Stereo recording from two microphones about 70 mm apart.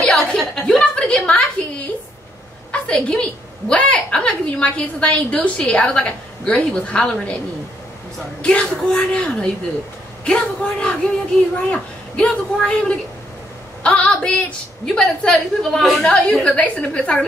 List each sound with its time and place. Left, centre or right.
0.0 s a sound: centre
2.7 s a woman's voice: centre
8.4 s a woman's voice: centre
16.4 s a woman's voice: centre